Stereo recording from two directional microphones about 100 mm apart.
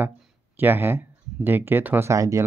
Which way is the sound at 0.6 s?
20° right (ahead or behind).